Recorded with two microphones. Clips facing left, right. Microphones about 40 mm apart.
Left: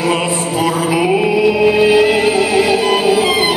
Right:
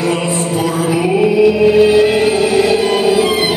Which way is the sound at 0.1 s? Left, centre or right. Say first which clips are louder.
Even; centre.